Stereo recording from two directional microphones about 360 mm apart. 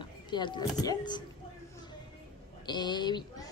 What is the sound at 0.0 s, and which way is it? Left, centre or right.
Speech, centre.